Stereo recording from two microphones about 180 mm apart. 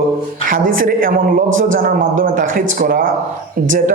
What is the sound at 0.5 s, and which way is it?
A man's voice, 50° right (ahead or behind).